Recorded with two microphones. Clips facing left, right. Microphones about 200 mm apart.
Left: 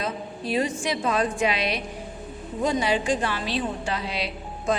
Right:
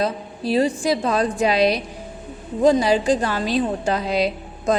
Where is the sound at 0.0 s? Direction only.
35° right (ahead or behind).